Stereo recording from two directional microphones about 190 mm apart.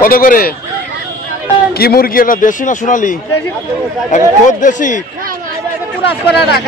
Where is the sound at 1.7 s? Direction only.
55° left (ahead or behind).